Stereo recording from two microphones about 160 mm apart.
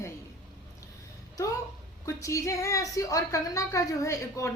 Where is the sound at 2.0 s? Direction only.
20° left (ahead or behind).